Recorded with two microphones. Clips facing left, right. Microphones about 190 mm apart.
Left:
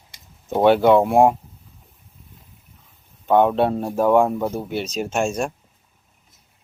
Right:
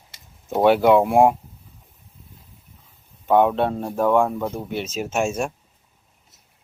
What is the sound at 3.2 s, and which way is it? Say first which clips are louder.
Speech: left 1 dB; centre (ahead or behind).